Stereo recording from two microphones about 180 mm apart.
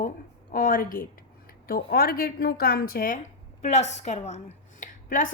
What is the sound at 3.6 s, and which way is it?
A woman's voice, 40° left (ahead or behind).